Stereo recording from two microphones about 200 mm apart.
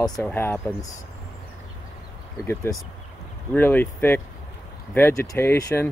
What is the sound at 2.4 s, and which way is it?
Speech, 10° left (ahead or behind).